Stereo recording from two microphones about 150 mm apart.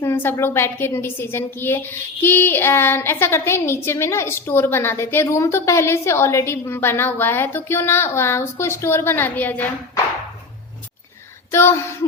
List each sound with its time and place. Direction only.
0.0 s a woman's voice: 15° left (ahead or behind)
11.5 s a woman's voice: 20° left (ahead or behind)